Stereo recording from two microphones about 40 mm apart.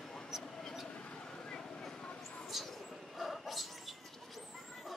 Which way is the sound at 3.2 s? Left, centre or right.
Centre.